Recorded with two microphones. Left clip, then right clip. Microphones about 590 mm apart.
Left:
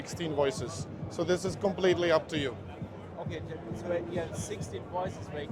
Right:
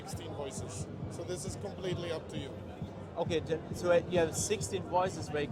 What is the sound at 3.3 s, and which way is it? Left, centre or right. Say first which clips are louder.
A man's voice: right 6 dB; right.